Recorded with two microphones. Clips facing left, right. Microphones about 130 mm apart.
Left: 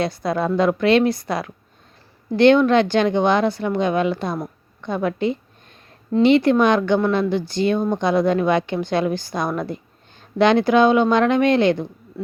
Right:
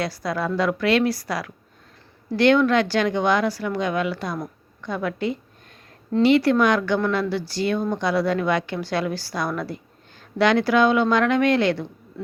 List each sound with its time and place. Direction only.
0.0 s speech: 25° left (ahead or behind)